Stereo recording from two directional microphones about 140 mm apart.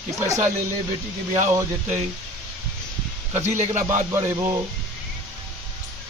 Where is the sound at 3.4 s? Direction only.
60° right (ahead or behind).